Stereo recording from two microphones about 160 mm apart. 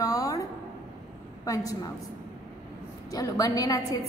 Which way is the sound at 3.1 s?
20° left (ahead or behind).